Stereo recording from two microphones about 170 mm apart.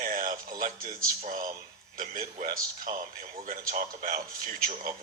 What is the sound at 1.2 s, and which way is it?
Speech, 50° right (ahead or behind).